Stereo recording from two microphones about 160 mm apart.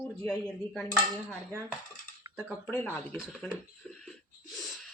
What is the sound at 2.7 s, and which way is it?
Speech, 15° left (ahead or behind).